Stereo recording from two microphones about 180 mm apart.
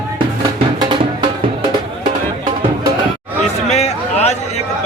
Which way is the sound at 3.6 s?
40° left (ahead or behind).